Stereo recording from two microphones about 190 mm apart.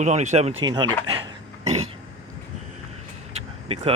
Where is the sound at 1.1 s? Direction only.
30° right (ahead or behind).